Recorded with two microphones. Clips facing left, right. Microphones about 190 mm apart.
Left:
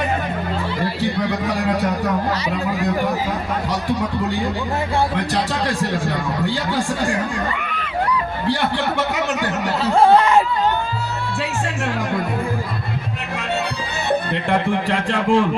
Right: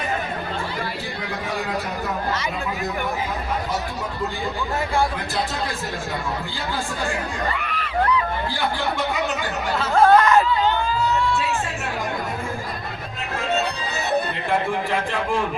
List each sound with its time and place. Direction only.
7.5 s a sound: 35° right (ahead or behind)
9.0 s a man's voice: 70° left (ahead or behind)
9.8 s speech: 30° left (ahead or behind)
14.5 s a man's voice: 75° left (ahead or behind)